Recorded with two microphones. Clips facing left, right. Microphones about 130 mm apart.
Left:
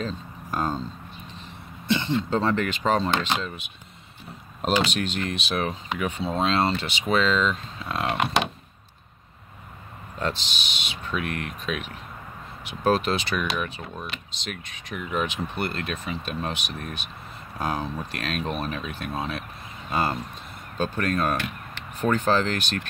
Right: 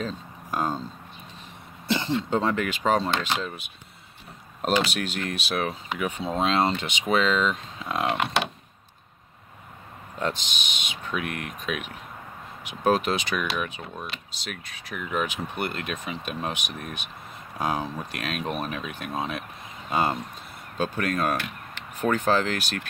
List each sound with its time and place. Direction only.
0.0 s speech: 10° right (ahead or behind)
1.9 s a sound: 35° right (ahead or behind)
2.2 s speech: 20° right (ahead or behind)
10.1 s speech: 10° right (ahead or behind)